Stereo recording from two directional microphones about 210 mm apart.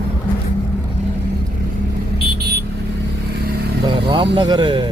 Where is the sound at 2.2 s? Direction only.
45° right (ahead or behind).